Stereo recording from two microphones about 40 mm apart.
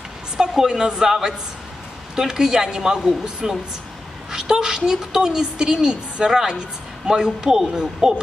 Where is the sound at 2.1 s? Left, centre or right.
Centre.